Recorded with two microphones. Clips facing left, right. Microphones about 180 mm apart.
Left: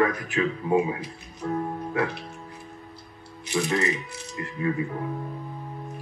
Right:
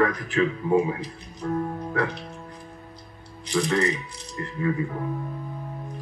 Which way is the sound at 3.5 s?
25° left (ahead or behind).